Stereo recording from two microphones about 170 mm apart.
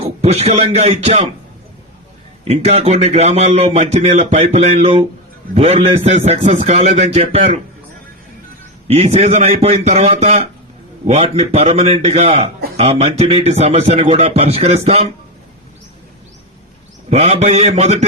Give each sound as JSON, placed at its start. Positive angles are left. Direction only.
{"t": 0.0, "sound": "a man's voice", "side_deg": -40}
{"t": 2.4, "sound": "a man's voice", "side_deg": -40}
{"t": 8.9, "sound": "a man's voice", "side_deg": -35}
{"t": 17.1, "sound": "a man's voice", "side_deg": -35}